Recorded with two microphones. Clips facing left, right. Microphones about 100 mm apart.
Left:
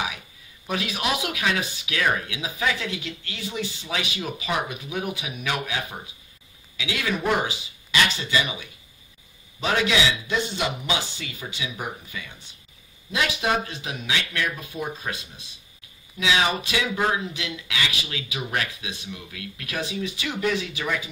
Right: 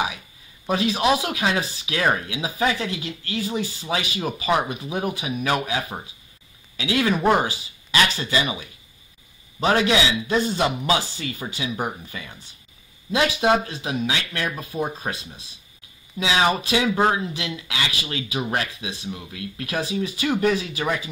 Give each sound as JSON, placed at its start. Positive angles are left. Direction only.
{"t": 0.7, "sound": "speech", "side_deg": -35}